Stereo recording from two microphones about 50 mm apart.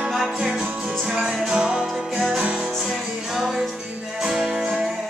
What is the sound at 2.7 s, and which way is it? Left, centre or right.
Music, centre.